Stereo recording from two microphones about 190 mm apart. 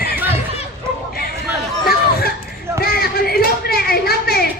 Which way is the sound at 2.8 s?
55° left (ahead or behind).